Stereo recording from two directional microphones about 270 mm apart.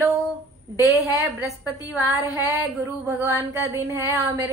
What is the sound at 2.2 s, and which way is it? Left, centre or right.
A woman's voice, centre.